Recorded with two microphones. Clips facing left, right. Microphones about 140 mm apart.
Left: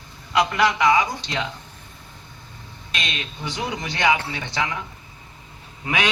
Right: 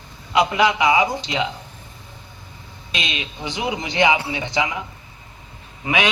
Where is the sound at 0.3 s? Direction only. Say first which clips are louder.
Right 2 dB; 15° right (ahead or behind).